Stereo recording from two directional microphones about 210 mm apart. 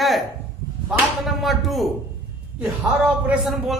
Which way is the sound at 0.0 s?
Centre (ahead or behind).